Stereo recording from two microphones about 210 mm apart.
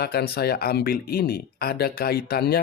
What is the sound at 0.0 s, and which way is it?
Speech, 50° left (ahead or behind).